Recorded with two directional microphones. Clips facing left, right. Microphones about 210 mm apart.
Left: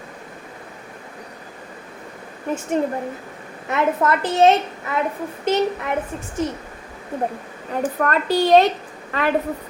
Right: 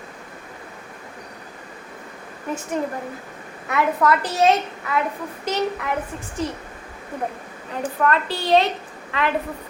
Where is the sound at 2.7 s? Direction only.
30° left (ahead or behind).